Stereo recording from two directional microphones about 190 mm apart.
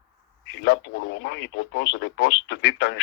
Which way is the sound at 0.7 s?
70° left (ahead or behind).